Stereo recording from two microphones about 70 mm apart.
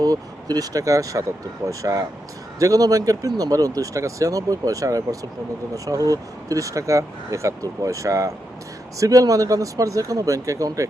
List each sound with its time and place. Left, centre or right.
0.0 s speech: right